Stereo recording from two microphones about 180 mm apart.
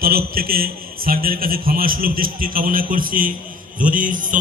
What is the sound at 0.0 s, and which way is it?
A man's voice, 55° right (ahead or behind).